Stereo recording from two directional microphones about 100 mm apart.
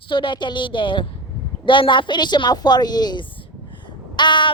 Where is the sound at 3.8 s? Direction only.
50° left (ahead or behind).